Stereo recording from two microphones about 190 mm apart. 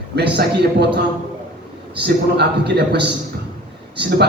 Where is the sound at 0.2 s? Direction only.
60° right (ahead or behind).